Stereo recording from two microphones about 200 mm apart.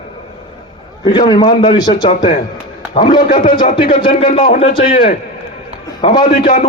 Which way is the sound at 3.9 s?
25° left (ahead or behind).